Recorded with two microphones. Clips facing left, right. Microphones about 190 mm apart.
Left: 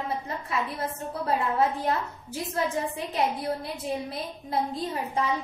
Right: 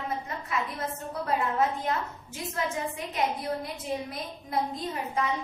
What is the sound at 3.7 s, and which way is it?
Speech, 30° left (ahead or behind).